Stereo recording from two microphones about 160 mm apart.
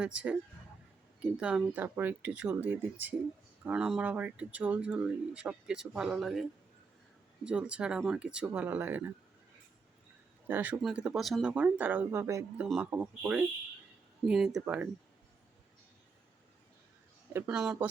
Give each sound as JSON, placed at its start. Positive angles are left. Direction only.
{"t": 0.0, "sound": "speech", "side_deg": -10}
{"t": 7.4, "sound": "speech", "side_deg": -5}
{"t": 10.5, "sound": "speech", "side_deg": -10}
{"t": 12.6, "sound": "speech", "side_deg": -5}
{"t": 17.3, "sound": "speech", "side_deg": -10}